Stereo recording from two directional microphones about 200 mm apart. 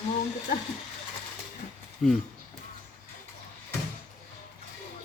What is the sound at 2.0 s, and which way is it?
Speech, centre (ahead or behind).